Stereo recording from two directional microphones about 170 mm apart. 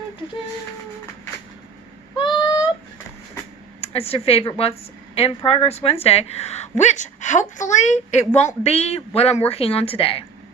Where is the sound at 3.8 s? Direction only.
35° left (ahead or behind).